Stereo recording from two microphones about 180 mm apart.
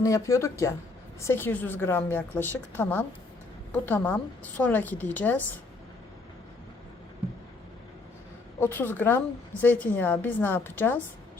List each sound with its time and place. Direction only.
0.0 s a woman's voice: 15° left (ahead or behind)
8.6 s a woman's voice: 10° left (ahead or behind)